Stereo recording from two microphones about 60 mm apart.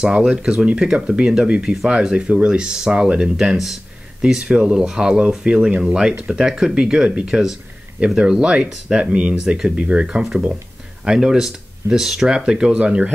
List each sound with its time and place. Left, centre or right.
0.0 s speech: centre
4.2 s speech: centre